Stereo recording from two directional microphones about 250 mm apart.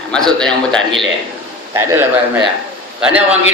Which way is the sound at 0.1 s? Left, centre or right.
Centre.